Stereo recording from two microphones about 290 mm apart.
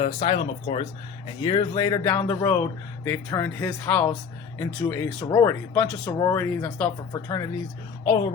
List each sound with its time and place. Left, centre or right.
0.0 s speech: centre